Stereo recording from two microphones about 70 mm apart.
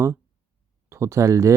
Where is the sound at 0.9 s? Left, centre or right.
Right.